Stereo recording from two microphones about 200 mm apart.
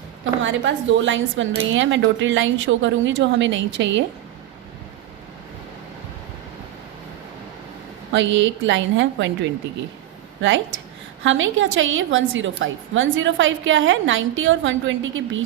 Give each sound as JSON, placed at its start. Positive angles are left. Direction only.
{"t": 0.4, "sound": "a woman's voice", "side_deg": -70}
{"t": 8.1, "sound": "a woman's voice", "side_deg": -65}
{"t": 11.2, "sound": "a woman's voice", "side_deg": -70}